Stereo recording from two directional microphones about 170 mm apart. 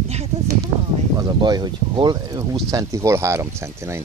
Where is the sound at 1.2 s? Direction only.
25° right (ahead or behind).